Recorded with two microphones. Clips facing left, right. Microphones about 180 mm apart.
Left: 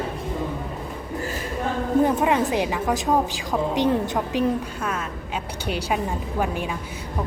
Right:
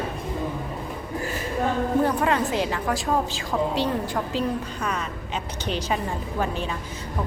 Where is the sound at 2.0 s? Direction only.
15° left (ahead or behind).